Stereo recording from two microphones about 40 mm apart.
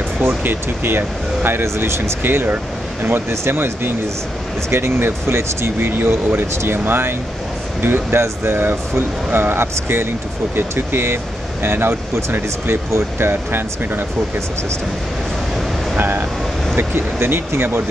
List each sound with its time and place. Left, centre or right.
0.3 s music: right
0.8 s speech: right
2.4 s speech: right
3.1 s speech: right
4.6 s speech: right
16.0 s speech: right
16.7 s speech: right